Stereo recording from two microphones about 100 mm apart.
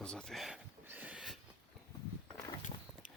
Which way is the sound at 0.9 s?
15° right (ahead or behind).